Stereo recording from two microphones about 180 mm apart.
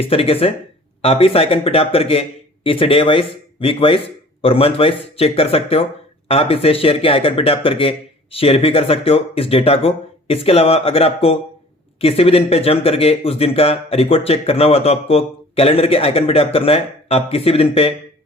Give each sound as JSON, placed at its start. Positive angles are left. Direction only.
{"t": 0.0, "sound": "speech", "side_deg": 30}